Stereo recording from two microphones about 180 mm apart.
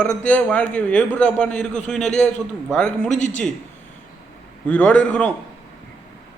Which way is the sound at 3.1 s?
40° left (ahead or behind).